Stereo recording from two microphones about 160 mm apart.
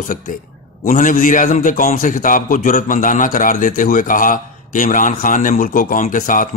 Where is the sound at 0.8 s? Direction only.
55° left (ahead or behind).